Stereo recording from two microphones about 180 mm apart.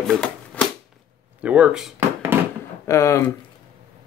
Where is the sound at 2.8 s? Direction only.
15° left (ahead or behind).